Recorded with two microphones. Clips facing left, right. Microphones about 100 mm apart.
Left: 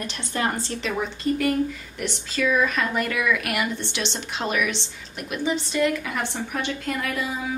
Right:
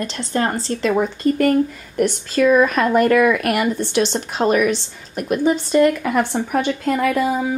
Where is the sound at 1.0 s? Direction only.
50° right (ahead or behind).